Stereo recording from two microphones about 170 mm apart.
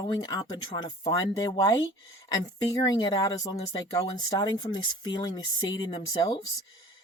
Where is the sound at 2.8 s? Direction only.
25° left (ahead or behind).